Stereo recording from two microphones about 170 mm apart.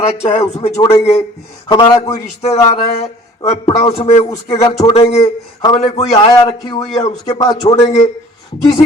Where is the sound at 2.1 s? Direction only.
40° left (ahead or behind).